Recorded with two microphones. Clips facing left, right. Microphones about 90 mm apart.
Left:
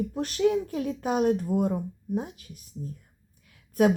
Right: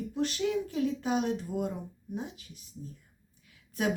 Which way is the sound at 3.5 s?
50° left (ahead or behind).